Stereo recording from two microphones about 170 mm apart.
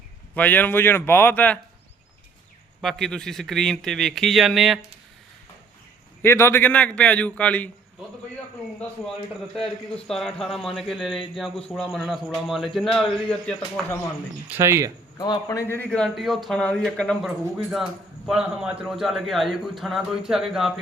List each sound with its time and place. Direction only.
0.3 s a man's voice: 10° left (ahead or behind)
2.8 s a man's voice: centre (ahead or behind)
6.2 s a man's voice: 15° left (ahead or behind)
9.6 s a man's voice: 5° left (ahead or behind)
14.5 s speech: 15° right (ahead or behind)
15.2 s a man's voice: 20° left (ahead or behind); by 20.7 s centre (ahead or behind)